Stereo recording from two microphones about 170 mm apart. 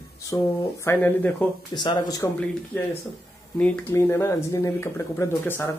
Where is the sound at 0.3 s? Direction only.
20° left (ahead or behind).